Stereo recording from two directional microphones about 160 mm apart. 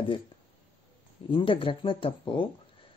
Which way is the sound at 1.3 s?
35° left (ahead or behind).